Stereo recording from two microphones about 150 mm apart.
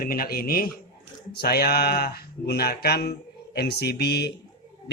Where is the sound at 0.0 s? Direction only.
75° left (ahead or behind).